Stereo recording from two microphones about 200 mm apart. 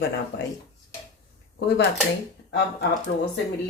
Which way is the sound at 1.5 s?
55° left (ahead or behind).